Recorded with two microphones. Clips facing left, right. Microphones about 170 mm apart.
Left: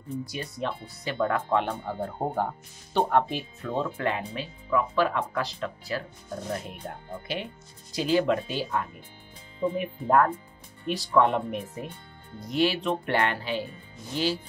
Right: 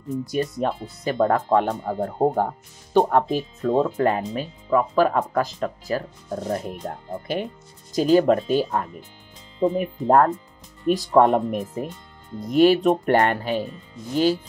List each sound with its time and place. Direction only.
0.3 s speech: 45° right (ahead or behind)